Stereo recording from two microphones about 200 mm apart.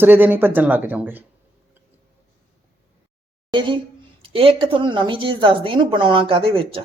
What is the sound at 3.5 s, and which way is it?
A woman's voice, 25° right (ahead or behind).